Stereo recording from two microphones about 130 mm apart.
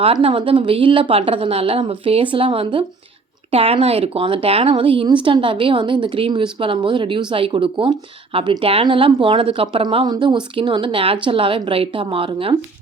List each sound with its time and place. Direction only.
0.0 s a woman's voice: 45° right (ahead or behind)